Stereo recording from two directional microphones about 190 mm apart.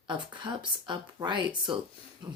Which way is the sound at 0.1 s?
25° right (ahead or behind).